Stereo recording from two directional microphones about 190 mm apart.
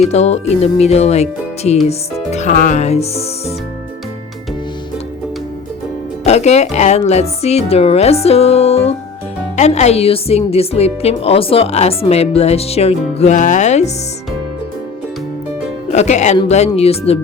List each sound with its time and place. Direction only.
0.1 s a woman's voice: 35° left (ahead or behind)
6.2 s a woman's voice: 35° left (ahead or behind)
15.9 s a woman's voice: 35° left (ahead or behind)